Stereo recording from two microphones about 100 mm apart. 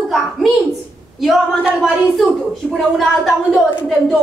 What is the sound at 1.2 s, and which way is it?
Speech, centre (ahead or behind).